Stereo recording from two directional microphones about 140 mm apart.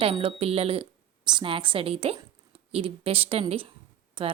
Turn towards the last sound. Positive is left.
turn(degrees=-40)  # may be behind; listen again after turning